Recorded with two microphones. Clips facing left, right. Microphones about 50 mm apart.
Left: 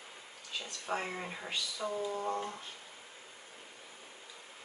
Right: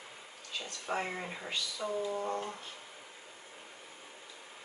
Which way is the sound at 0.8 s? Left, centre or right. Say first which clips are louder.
Right 1 dB; centre.